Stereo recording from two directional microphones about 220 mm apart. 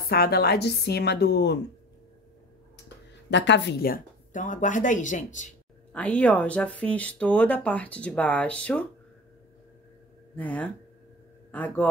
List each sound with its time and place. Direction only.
0.0 s a woman's voice: 45° left (ahead or behind)
3.3 s a woman's voice: 55° left (ahead or behind); by 5.5 s 35° left (ahead or behind)
5.9 s speech: 5° left (ahead or behind)
10.3 s speech: 5° left (ahead or behind)